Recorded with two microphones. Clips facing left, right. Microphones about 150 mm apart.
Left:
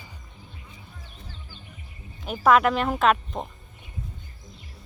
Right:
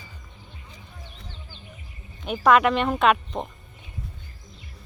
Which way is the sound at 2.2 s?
Centre (ahead or behind).